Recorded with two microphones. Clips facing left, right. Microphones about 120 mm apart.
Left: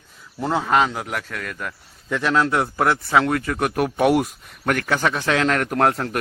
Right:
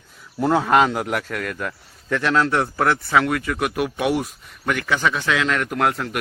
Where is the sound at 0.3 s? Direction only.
Centre (ahead or behind).